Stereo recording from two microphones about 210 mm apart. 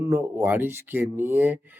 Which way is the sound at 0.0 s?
10° right (ahead or behind).